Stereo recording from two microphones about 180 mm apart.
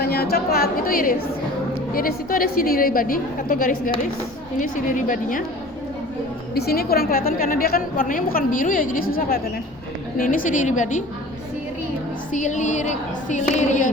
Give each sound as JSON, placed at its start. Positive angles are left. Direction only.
{"t": 0.0, "sound": "a woman's voice", "side_deg": 60}
{"t": 6.5, "sound": "a woman's voice", "side_deg": 60}
{"t": 12.3, "sound": "speech", "side_deg": 40}